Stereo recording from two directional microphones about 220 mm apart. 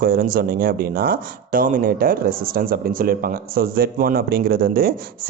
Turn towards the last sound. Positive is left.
turn(degrees=-40)  # may be behind; listen again after turning